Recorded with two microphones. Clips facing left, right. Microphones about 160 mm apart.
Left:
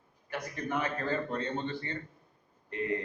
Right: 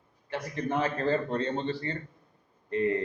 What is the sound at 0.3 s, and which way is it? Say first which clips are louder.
Speech: right 4 dB; 30° right (ahead or behind).